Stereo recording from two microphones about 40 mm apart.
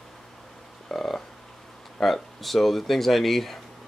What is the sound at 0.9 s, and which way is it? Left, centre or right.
Frog, centre.